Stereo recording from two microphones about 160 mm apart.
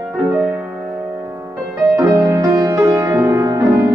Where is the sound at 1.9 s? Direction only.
15° right (ahead or behind).